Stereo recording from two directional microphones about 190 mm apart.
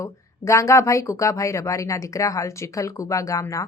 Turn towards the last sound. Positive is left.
turn(degrees=15)  # may be behind; listen again after turning